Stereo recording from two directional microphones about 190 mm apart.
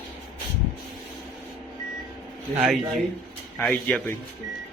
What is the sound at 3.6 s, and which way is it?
Speech, 5° left (ahead or behind).